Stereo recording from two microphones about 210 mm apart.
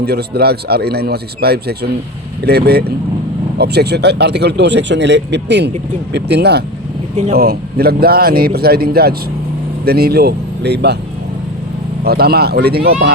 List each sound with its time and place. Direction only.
0.0 s a man's voice: 50° right (ahead or behind)
12.0 s a man's voice: 50° right (ahead or behind)